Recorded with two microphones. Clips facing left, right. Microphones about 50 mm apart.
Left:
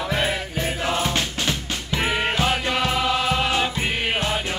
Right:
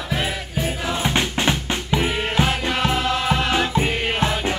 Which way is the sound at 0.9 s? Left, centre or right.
Right.